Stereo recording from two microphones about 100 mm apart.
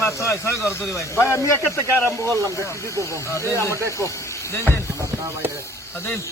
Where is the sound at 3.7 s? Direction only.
30° right (ahead or behind).